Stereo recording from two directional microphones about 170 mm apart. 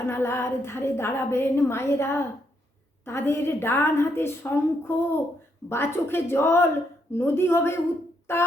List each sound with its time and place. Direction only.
0.1 s a woman's voice: 15° left (ahead or behind)